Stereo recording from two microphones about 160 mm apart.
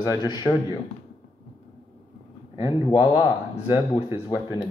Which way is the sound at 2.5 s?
30° left (ahead or behind).